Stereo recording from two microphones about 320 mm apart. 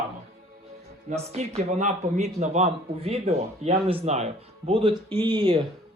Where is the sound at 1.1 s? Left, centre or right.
Centre.